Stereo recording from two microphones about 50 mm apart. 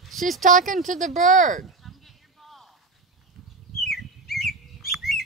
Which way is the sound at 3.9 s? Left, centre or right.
Centre.